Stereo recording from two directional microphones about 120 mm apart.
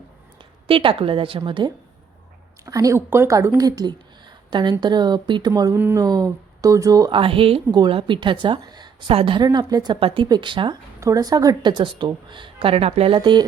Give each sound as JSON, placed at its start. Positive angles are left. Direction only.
{"t": 0.7, "sound": "a woman's voice", "side_deg": -45}
{"t": 2.6, "sound": "a woman's voice", "side_deg": -30}
{"t": 5.7, "sound": "speech", "side_deg": -20}
{"t": 6.0, "sound": "a woman's voice", "side_deg": -30}
{"t": 7.1, "sound": "a woman's voice", "side_deg": -45}
{"t": 9.4, "sound": "a woman's voice", "side_deg": -35}
{"t": 11.0, "sound": "a woman's voice", "side_deg": -30}
{"t": 13.1, "sound": "a woman's voice", "side_deg": -40}